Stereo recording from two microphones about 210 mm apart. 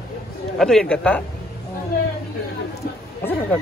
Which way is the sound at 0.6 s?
5° left (ahead or behind).